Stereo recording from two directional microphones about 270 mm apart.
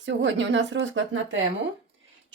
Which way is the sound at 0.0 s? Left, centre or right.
Right.